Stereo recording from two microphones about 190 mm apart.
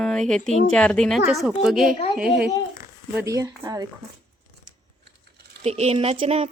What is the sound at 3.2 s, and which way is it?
Speech, 15° right (ahead or behind).